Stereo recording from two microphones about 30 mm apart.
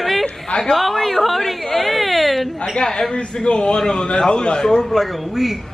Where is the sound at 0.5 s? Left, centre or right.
Left.